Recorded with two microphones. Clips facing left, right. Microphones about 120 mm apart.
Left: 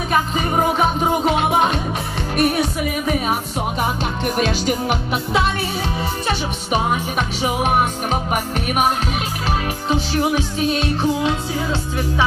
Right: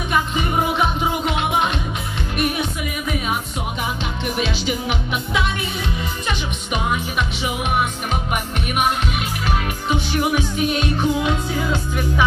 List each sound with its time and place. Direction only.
0.1 s music: 40° left (ahead or behind)
4.4 s music: 45° left (ahead or behind)